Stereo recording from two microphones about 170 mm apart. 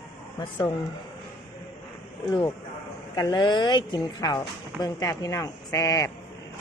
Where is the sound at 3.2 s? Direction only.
25° left (ahead or behind).